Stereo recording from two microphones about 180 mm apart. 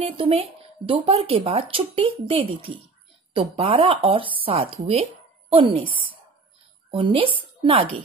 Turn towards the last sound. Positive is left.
turn(degrees=-30)  # may be behind; listen again after turning